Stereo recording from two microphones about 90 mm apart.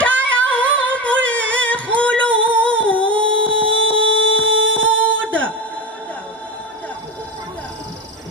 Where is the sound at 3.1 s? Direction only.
70° right (ahead or behind).